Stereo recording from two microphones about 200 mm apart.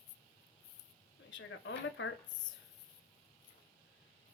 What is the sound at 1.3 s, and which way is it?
Speech, 70° left (ahead or behind).